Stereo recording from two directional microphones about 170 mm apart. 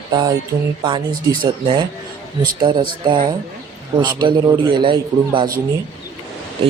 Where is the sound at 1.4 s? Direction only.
25° right (ahead or behind).